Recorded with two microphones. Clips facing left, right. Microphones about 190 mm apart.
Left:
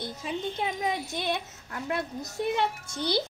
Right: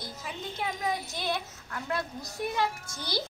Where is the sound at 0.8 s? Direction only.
20° left (ahead or behind).